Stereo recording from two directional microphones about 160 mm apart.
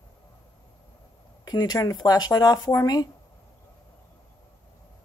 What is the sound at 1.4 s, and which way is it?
Speech, 25° left (ahead or behind).